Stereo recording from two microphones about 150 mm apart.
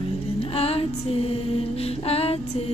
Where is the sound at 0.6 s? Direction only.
40° left (ahead or behind).